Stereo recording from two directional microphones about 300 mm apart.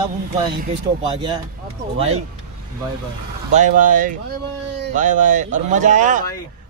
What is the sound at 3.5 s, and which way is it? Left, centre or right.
Speech, right.